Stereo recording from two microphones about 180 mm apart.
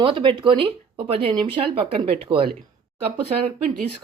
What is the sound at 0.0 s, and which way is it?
Speech, 30° right (ahead or behind).